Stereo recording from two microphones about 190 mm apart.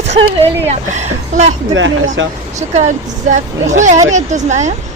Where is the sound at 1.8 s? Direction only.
90° right.